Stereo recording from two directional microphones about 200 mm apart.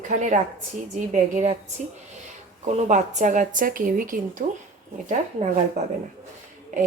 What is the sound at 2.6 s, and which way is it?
A woman's voice, 35° right (ahead or behind).